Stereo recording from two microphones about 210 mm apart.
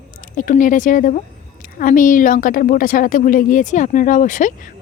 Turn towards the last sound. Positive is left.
turn(degrees=40)  # may be behind; listen again after turning